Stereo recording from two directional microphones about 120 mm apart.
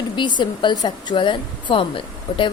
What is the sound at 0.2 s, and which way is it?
A woman's voice, 40° left (ahead or behind).